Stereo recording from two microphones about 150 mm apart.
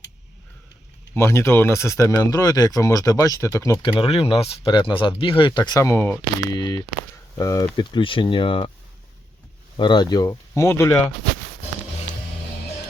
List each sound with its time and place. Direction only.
1.1 s speech: 20° left (ahead or behind)
4.0 s speech: 40° left (ahead or behind)
9.7 s speech: 30° left (ahead or behind)